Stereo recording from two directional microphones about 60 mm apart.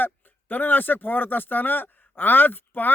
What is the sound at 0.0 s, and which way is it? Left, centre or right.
Speech, left.